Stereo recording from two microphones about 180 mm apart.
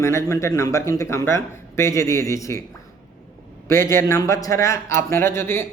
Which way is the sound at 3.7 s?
15° left (ahead or behind).